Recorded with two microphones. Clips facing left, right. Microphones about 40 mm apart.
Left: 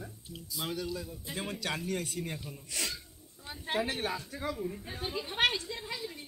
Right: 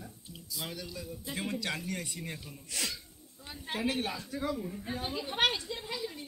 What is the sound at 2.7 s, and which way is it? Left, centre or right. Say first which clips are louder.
Speech: even; left.